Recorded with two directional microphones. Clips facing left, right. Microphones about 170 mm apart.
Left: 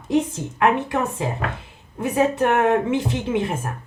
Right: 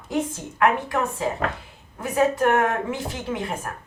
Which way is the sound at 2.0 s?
25° left (ahead or behind).